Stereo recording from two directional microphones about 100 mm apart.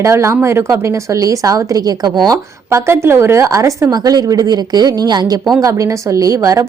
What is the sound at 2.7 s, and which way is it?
A woman's voice, 25° right (ahead or behind).